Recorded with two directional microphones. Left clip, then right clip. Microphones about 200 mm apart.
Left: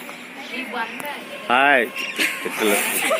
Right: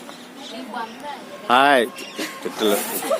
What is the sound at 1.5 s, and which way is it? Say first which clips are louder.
Speech: right 1 dB; 20° right (ahead or behind).